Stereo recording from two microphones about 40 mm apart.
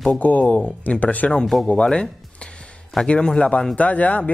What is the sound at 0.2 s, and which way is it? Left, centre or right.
A man's voice, left.